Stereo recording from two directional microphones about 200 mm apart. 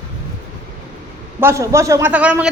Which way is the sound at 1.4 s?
15° right (ahead or behind).